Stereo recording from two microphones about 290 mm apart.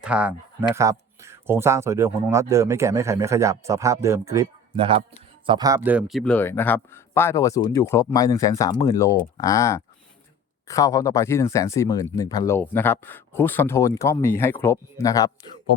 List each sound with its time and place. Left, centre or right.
0.0 s speech: centre